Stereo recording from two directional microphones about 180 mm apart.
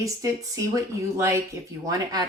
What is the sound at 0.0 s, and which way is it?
Speech, 20° right (ahead or behind).